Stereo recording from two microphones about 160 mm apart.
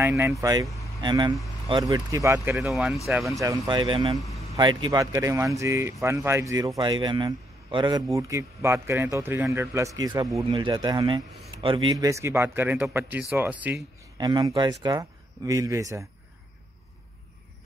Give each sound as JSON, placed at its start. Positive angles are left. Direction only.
{"t": 0.4, "sound": "speech", "side_deg": -20}
{"t": 0.8, "sound": "a sound", "side_deg": -25}
{"t": 1.7, "sound": "speech", "side_deg": -25}
{"t": 2.5, "sound": "speech", "side_deg": -5}
{"t": 3.3, "sound": "speech", "side_deg": -20}
{"t": 14.1, "sound": "speech", "side_deg": -25}